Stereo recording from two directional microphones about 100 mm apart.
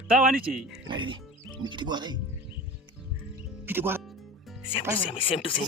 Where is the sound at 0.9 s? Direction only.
55° right (ahead or behind).